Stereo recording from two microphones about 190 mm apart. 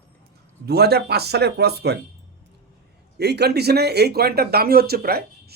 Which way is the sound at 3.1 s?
60° right (ahead or behind).